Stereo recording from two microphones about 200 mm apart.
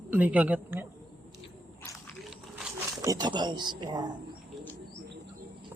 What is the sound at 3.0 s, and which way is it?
Speech, 20° right (ahead or behind).